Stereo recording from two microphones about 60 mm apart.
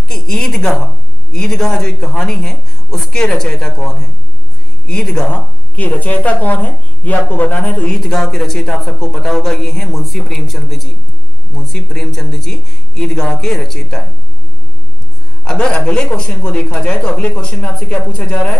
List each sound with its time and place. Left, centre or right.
0.1 s a woman's voice: centre
5.3 s speech: left
7.9 s speech: centre
15.4 s speech: centre